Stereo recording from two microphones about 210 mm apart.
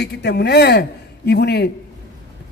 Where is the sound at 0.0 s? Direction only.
50° left (ahead or behind).